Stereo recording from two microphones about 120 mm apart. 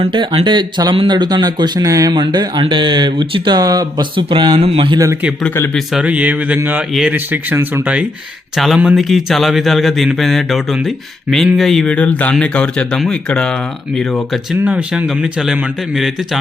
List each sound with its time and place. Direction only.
0.0 s speech: 45° right (ahead or behind)
4.1 s speech: 45° right (ahead or behind)
5.7 s a man's voice: 5° right (ahead or behind)
8.5 s a man's voice: 5° right (ahead or behind)
14.6 s a man's voice: 10° right (ahead or behind)